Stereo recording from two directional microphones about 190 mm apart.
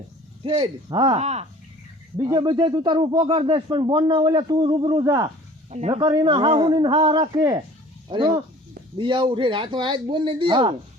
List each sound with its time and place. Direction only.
0.4 s a man's voice: 25° right (ahead or behind)
1.2 s speech: 35° right (ahead or behind)
2.1 s a man's voice: 20° right (ahead or behind)
5.7 s speech: 35° right (ahead or behind)
6.0 s a man's voice: 20° right (ahead or behind)